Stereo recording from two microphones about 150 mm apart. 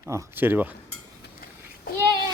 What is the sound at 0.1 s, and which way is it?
Speech, 15° right (ahead or behind).